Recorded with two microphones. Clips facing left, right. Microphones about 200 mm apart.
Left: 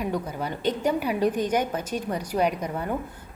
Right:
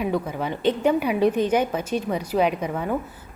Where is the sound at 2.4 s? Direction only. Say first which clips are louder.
Right 3 dB; 90° right.